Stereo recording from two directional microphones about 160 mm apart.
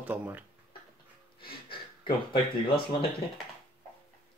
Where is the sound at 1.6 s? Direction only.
30° left (ahead or behind).